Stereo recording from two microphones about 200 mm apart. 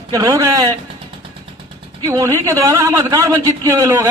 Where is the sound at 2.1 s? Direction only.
15° right (ahead or behind).